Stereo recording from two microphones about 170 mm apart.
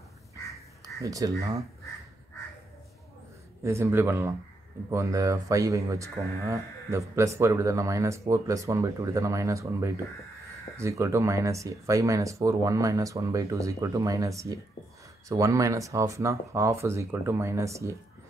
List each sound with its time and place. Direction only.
1.0 s speech: 20° right (ahead or behind)
3.6 s speech: 15° right (ahead or behind)